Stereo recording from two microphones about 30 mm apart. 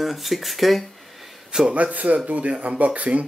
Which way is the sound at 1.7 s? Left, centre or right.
Right.